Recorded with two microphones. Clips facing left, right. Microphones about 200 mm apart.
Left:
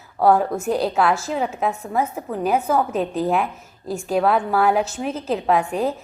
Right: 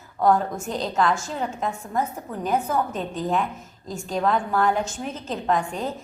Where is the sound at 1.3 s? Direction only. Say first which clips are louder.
Left 5 dB; 65° left (ahead or behind).